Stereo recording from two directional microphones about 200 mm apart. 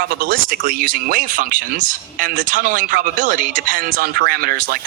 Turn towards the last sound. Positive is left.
turn(degrees=-45)  # may be behind; listen again after turning